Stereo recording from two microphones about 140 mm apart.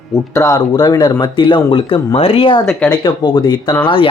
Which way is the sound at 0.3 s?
25° left (ahead or behind).